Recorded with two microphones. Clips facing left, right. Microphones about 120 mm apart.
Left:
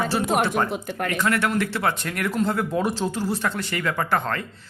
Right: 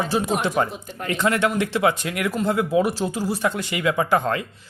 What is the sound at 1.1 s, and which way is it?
Speech, 20° right (ahead or behind).